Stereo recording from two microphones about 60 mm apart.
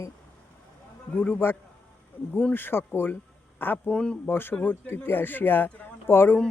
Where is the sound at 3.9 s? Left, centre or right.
Centre.